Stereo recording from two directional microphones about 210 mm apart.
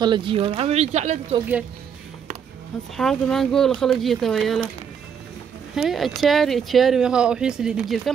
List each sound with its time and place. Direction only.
0.0 s speech: 20° right (ahead or behind)
3.0 s speech: centre (ahead or behind)
5.8 s speech: centre (ahead or behind)